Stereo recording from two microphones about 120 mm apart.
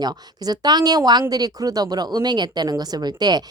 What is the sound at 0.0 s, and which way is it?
Speech, 35° right (ahead or behind).